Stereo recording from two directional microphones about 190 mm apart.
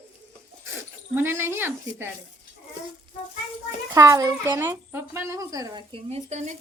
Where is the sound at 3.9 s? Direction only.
15° right (ahead or behind); by 6.6 s 35° right (ahead or behind).